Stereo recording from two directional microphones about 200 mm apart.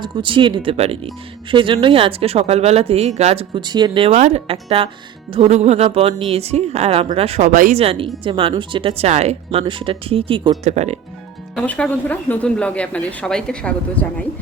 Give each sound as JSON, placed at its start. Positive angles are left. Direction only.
{"t": 0.0, "sound": "speech", "side_deg": -25}
{"t": 7.8, "sound": "speech", "side_deg": -30}
{"t": 11.5, "sound": "speech", "side_deg": 5}